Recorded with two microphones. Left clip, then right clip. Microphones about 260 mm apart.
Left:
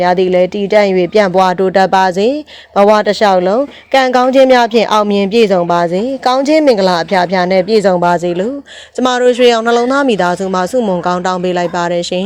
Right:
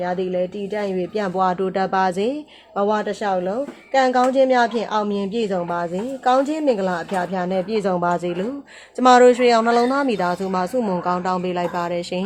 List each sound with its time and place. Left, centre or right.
0.0 s speech: left
2.7 s speech: left